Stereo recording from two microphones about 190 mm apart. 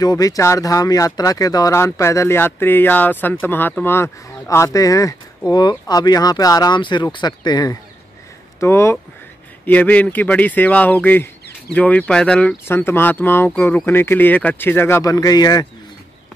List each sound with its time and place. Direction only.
0.0 s speech: 20° left (ahead or behind)